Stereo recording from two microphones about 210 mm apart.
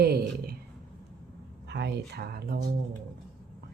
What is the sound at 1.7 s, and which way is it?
Speech, 55° right (ahead or behind).